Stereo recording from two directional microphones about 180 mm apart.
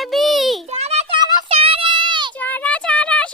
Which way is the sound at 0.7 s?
35° right (ahead or behind).